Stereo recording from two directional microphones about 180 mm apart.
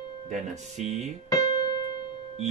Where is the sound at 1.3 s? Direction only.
20° left (ahead or behind).